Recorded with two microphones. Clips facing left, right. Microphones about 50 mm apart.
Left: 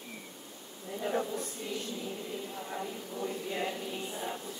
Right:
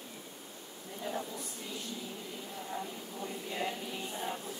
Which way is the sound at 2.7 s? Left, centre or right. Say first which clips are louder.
Left 1 dB; centre.